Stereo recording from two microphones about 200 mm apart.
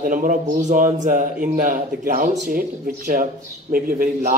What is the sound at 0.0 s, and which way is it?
A man's voice, 40° right (ahead or behind).